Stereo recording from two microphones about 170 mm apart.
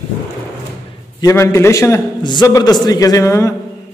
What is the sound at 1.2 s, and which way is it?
A man's voice, 15° left (ahead or behind).